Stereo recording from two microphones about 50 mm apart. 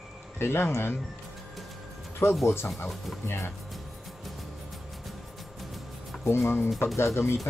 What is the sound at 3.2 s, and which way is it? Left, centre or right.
Speech, left.